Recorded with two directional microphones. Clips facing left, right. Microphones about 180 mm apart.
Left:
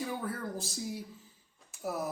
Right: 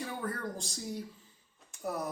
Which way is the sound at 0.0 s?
5° left (ahead or behind).